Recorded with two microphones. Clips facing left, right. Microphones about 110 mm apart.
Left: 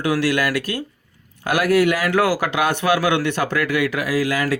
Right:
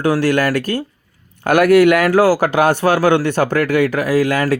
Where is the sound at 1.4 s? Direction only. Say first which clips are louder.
Right 7 dB; 60° right (ahead or behind).